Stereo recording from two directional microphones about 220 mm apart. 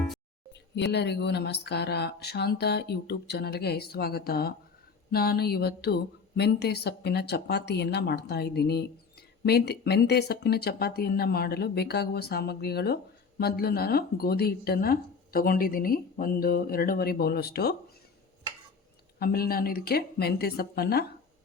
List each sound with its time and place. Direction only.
0.8 s speech: 50° left (ahead or behind)
19.2 s speech: 45° left (ahead or behind)